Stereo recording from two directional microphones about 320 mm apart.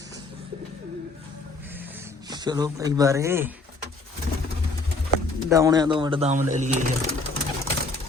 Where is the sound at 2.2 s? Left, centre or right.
Centre.